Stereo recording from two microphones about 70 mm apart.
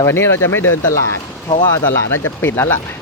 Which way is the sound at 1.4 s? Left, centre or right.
Left.